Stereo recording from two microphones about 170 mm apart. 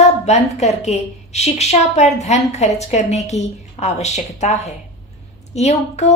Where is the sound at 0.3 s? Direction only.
40° left (ahead or behind).